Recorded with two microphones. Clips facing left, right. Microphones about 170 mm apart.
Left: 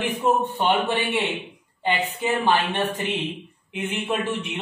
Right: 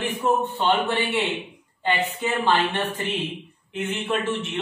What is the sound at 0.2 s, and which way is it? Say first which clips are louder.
A man's voice: even; 20° left (ahead or behind).